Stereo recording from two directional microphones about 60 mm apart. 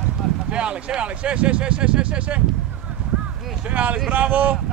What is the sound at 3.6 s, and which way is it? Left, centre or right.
Speech, right.